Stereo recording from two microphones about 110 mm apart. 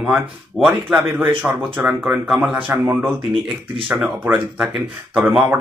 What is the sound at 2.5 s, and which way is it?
Speech, 15° right (ahead or behind).